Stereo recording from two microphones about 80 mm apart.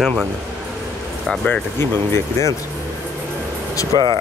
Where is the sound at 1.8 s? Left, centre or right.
Left.